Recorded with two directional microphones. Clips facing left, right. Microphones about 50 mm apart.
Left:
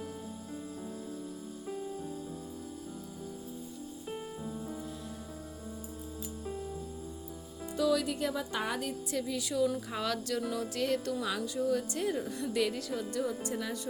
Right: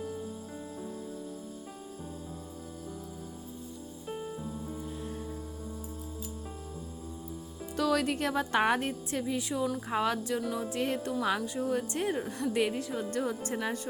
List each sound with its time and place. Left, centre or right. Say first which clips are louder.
7.8 s speech: right 1 dB; right
9.9 s music: right 4 dB; right
11.3 s speech: even; right
13.1 s speech: right 2 dB; right